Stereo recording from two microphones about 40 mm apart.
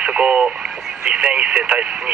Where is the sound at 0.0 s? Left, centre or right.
Right.